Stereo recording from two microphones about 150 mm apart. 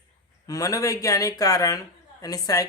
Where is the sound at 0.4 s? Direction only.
25° left (ahead or behind).